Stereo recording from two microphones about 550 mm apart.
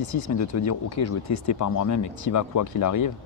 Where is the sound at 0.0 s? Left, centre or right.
Left.